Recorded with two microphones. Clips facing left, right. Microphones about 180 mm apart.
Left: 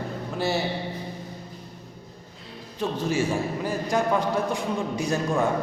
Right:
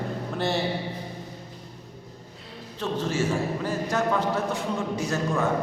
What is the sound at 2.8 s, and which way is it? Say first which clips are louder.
A man's voice: left 1 dB; 10° left (ahead or behind).